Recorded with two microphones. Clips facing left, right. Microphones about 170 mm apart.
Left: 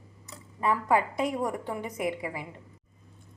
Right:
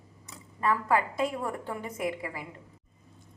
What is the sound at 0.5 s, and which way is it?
A woman's voice, 15° left (ahead or behind).